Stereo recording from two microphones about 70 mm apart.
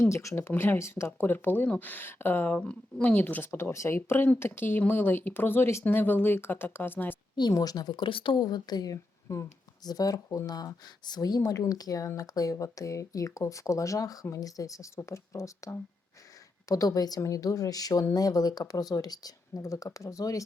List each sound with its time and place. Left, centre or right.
0.0 s speech: left
0.3 s speech: left
1.3 s speech: left
2.6 s speech: centre
3.5 s speech: left
7.5 s speech: left
9.8 s speech: left
17.2 s speech: left